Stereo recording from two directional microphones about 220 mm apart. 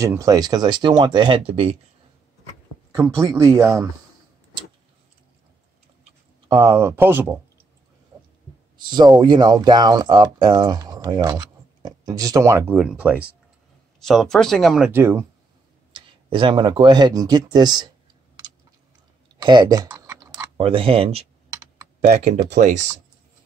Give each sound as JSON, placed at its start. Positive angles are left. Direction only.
{"t": 0.0, "sound": "speech", "side_deg": -15}
{"t": 3.3, "sound": "speech", "side_deg": -15}
{"t": 6.5, "sound": "speech", "side_deg": -15}
{"t": 8.7, "sound": "speech", "side_deg": -20}
{"t": 16.3, "sound": "speech", "side_deg": -20}
{"t": 19.4, "sound": "typing", "side_deg": -20}
{"t": 20.5, "sound": "speech", "side_deg": -25}